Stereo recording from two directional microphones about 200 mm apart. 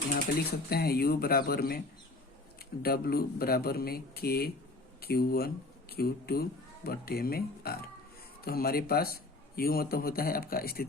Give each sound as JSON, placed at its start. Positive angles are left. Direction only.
{"t": 0.3, "sound": "speech", "side_deg": 50}
{"t": 2.8, "sound": "speech", "side_deg": 50}